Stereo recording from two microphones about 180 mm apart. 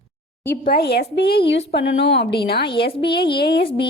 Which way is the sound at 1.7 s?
80° left.